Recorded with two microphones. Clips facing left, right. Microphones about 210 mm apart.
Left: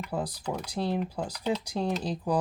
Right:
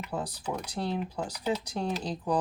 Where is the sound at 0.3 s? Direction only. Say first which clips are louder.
Left 1 dB; 10° left (ahead or behind).